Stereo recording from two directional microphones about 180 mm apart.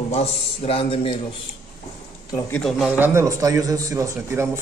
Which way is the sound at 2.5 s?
Centre (ahead or behind).